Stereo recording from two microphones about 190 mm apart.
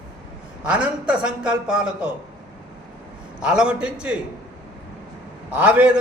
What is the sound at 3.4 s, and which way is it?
Speech, 5° right (ahead or behind).